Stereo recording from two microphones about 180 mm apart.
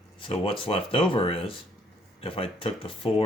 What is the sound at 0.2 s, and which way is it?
Speech, 30° left (ahead or behind).